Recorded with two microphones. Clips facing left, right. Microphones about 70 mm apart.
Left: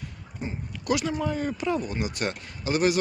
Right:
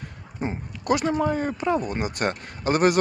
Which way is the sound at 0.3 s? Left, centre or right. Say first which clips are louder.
Right 5 dB; right.